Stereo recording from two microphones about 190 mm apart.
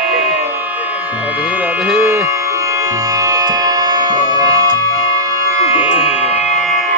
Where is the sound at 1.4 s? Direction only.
5° right (ahead or behind).